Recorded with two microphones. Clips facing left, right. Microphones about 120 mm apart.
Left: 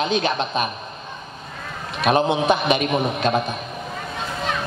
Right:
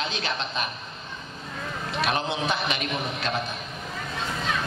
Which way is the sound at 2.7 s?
55° left (ahead or behind).